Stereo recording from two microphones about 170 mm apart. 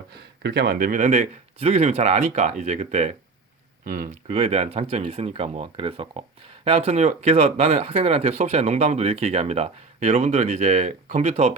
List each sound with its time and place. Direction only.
0.1 s speech: 70° right (ahead or behind); by 11.5 s 40° right (ahead or behind)